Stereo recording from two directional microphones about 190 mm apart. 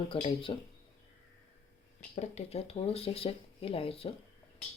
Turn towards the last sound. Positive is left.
turn(degrees=30)  # may be behind; listen again after turning